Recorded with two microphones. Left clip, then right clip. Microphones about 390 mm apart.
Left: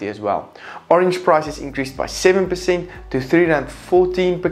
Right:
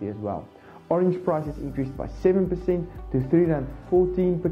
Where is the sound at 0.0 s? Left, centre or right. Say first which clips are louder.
Left 10 dB; centre.